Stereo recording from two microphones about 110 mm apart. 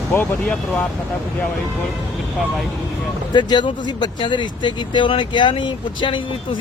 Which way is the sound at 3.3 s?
45° left (ahead or behind).